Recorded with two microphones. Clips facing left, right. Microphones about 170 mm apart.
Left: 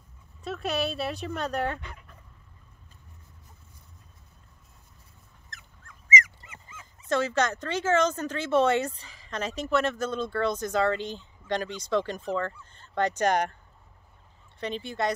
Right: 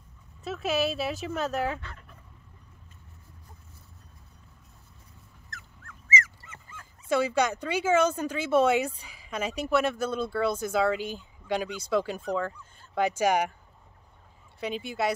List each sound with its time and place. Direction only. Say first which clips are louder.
0.4 s speech: right 2 dB; centre (ahead or behind)
1.8 s fowl: left 1 dB; 15° left (ahead or behind)
5.5 s dog: right 3 dB; 20° left (ahead or behind)
6.7 s dog: right 1 dB; 5° left (ahead or behind)
7.1 s speech: right 1 dB; 10° right (ahead or behind)
14.6 s speech: even; 10° right (ahead or behind)